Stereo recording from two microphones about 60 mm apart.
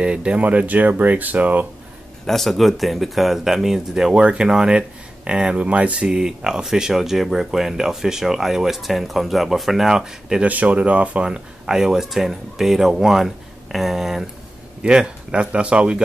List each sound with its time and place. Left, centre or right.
0.0 s speech: centre
2.2 s speech: centre
10.4 s speech: right; by 14.2 s centre
14.8 s speech: centre